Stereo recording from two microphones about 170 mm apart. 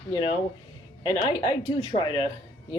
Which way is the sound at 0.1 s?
30° left (ahead or behind).